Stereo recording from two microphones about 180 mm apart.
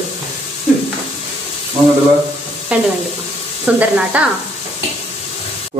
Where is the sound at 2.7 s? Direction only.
5° right (ahead or behind).